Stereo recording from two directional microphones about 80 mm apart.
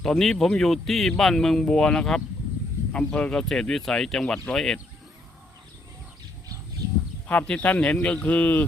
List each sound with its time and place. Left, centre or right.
0.0 s speech: centre
7.3 s speech: centre